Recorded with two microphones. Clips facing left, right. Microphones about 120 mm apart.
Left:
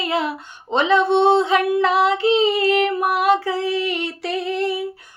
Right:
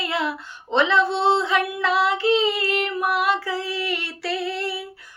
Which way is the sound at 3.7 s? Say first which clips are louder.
Left 5 dB; 20° left (ahead or behind).